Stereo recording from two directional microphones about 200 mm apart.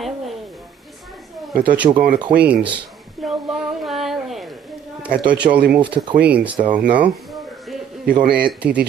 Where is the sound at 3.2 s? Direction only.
Centre (ahead or behind).